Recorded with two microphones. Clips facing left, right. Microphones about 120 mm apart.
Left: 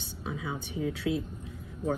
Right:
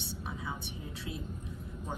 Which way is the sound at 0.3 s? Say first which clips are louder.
Left 7 dB; 90° left.